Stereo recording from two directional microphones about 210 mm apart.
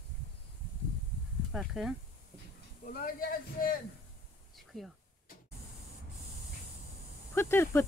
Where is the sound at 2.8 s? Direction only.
45° left (ahead or behind).